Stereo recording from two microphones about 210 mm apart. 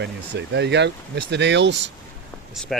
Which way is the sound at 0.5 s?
55° right (ahead or behind).